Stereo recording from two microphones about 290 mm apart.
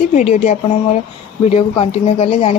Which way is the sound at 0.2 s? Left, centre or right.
Left.